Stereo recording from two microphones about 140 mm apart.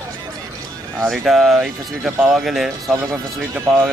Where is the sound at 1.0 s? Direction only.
Centre (ahead or behind).